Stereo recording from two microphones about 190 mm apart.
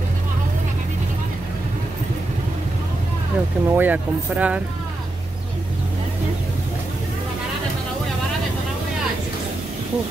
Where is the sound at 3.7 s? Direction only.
10° right (ahead or behind).